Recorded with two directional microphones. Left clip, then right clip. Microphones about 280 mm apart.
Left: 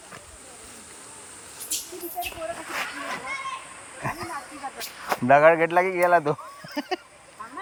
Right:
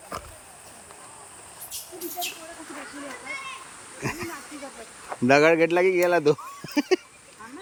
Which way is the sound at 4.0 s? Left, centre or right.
Centre.